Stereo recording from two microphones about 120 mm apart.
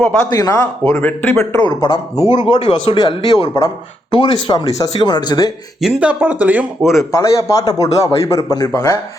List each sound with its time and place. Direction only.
0.3 s a man's voice: 30° left (ahead or behind)
1.6 s speech: 40° left (ahead or behind)
3.6 s a man's voice: 30° left (ahead or behind)
4.1 s speech: 45° left (ahead or behind)
4.5 s speech: 35° left (ahead or behind)
5.8 s speech: 10° right (ahead or behind)
6.9 s a man's voice: 25° left (ahead or behind)